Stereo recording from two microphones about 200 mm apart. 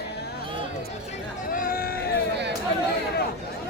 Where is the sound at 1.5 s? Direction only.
45° left (ahead or behind).